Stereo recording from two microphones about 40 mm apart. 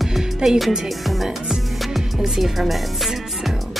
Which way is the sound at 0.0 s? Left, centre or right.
Centre.